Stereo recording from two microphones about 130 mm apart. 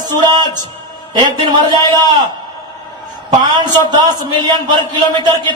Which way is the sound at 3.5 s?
30° right (ahead or behind).